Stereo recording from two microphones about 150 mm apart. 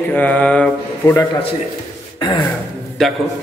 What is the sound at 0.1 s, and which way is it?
A man's voice, 10° left (ahead or behind).